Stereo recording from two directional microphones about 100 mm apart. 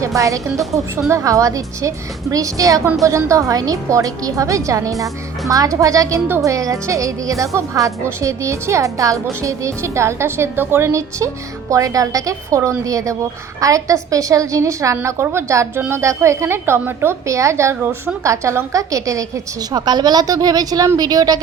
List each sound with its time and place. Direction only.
0.0 s a woman's voice: 35° right (ahead or behind)